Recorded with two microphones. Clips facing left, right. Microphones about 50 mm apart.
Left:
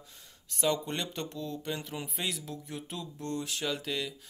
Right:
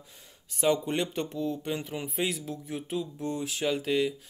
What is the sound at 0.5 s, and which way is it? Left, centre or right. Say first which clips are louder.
Speech: right 4 dB; centre.